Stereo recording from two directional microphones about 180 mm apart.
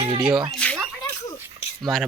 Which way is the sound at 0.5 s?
5° left (ahead or behind).